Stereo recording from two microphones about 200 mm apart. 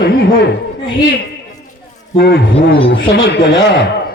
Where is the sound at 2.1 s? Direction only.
55° left (ahead or behind).